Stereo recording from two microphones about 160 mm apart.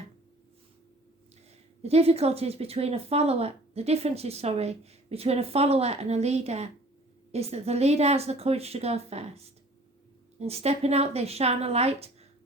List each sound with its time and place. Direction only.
1.8 s speech: 40° right (ahead or behind)